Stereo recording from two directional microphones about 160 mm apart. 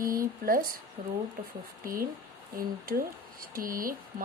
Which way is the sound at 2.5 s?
65° right (ahead or behind).